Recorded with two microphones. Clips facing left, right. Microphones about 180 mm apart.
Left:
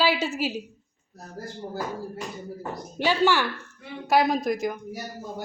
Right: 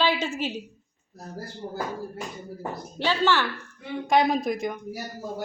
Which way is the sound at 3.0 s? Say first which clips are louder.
Left 1 dB; 15° left (ahead or behind).